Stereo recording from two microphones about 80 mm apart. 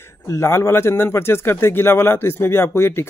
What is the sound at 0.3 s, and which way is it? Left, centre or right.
Speech, left.